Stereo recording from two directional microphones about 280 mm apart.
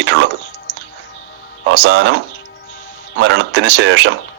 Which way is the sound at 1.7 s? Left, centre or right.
Right.